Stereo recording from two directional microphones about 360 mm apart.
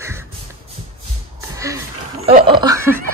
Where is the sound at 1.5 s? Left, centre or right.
Centre.